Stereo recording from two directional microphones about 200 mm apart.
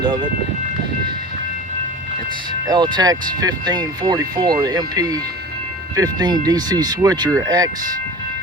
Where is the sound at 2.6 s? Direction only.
20° right (ahead or behind).